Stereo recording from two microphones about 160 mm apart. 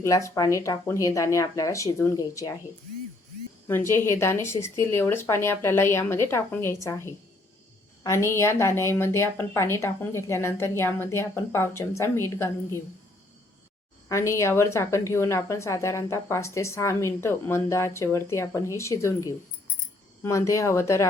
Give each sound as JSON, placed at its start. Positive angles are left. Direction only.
{"t": 0.0, "sound": "speech", "side_deg": 20}
{"t": 3.7, "sound": "a woman's voice", "side_deg": 15}
{"t": 14.1, "sound": "a woman's voice", "side_deg": 20}